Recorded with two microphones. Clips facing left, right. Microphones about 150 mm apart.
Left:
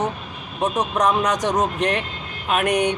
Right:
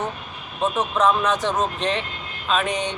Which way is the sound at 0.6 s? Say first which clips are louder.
Even; 15° left (ahead or behind).